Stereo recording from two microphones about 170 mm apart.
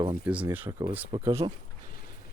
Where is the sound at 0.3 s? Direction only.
10° right (ahead or behind).